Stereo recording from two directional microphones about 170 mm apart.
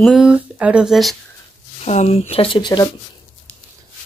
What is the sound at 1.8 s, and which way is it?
Speech, 40° left (ahead or behind).